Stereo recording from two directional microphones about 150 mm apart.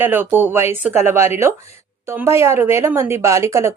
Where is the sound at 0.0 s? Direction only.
15° right (ahead or behind).